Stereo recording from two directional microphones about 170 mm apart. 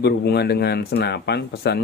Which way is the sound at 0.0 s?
75° left (ahead or behind).